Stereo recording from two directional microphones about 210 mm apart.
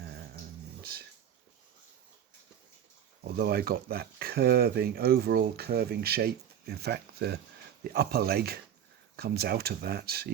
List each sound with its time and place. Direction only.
0.8 s music: 45° right (ahead or behind)
3.2 s speech: 50° right (ahead or behind)